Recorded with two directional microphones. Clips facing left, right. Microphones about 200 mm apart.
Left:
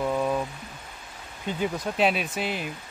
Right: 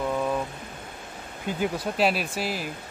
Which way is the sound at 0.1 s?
5° left (ahead or behind).